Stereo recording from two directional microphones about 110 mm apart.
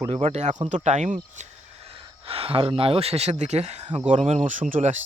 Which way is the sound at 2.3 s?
60° right (ahead or behind).